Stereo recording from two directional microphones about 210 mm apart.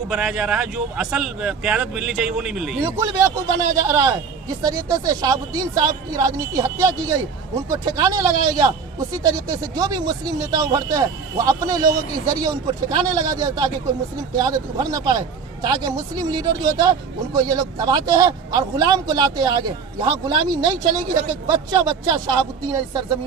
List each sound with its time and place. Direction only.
0.1 s a man's voice: 5° right (ahead or behind); by 22.2 s 20° right (ahead or behind)